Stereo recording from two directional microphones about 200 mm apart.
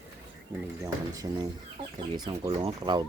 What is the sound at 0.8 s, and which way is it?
Speech, 15° right (ahead or behind).